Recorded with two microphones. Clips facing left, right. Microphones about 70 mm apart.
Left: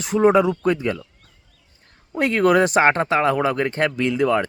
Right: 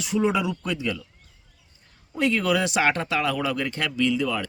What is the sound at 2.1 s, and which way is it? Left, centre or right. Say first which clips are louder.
Speech: left 6 dB; left.